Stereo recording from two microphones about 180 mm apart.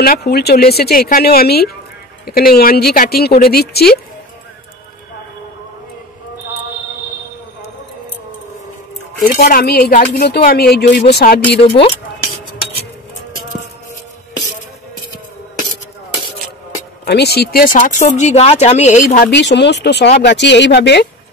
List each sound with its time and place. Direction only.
0.0 s speech: 60° left (ahead or behind)
9.2 s speech: 50° left (ahead or behind)
17.0 s speech: 65° left (ahead or behind)
19.3 s speech: 75° left (ahead or behind)